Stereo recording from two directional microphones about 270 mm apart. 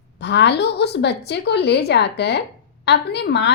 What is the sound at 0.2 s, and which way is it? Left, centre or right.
A woman's voice, left.